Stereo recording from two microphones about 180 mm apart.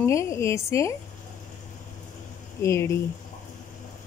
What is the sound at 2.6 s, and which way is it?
Speech, 15° left (ahead or behind).